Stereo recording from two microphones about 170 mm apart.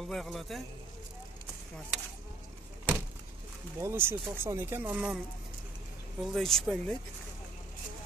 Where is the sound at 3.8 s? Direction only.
15° right (ahead or behind).